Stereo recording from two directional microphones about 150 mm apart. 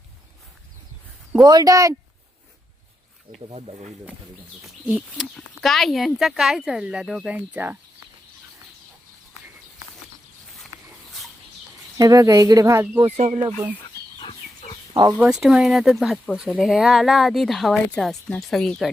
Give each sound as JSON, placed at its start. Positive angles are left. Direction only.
{"t": 1.4, "sound": "speech", "side_deg": -25}
{"t": 3.5, "sound": "speech", "side_deg": -45}
{"t": 4.9, "sound": "speech", "side_deg": -5}
{"t": 11.9, "sound": "speech", "side_deg": -25}
{"t": 13.1, "sound": "speech", "side_deg": -50}
{"t": 14.2, "sound": "livestock", "side_deg": 35}
{"t": 15.2, "sound": "speech", "side_deg": -5}